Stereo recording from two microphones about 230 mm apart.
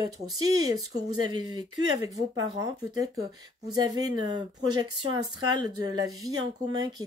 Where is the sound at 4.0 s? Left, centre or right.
Centre.